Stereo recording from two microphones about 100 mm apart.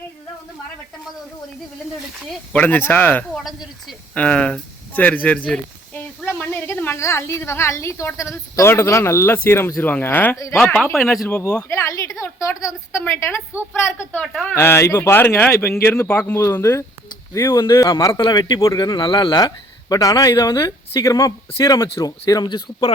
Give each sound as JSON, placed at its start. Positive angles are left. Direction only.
{"t": 2.5, "sound": "speech", "side_deg": 15}
{"t": 3.3, "sound": "speech", "side_deg": 0}
{"t": 4.1, "sound": "a woman's voice", "side_deg": 15}
{"t": 10.3, "sound": "speech", "side_deg": 35}
{"t": 10.7, "sound": "a woman's voice", "side_deg": 20}
{"t": 11.7, "sound": "a woman's voice", "side_deg": 30}
{"t": 17.7, "sound": "speech", "side_deg": 35}
{"t": 17.9, "sound": "a man's voice", "side_deg": 50}
{"t": 18.6, "sound": "speech", "side_deg": 30}
{"t": 18.9, "sound": "speech", "side_deg": 55}
{"t": 19.4, "sound": "speech", "side_deg": 40}
{"t": 22.3, "sound": "a man's voice", "side_deg": 45}